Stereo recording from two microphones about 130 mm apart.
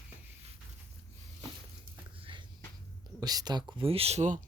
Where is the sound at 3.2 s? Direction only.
30° right (ahead or behind).